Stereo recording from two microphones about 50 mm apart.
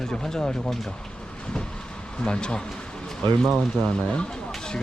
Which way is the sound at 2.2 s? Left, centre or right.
Centre.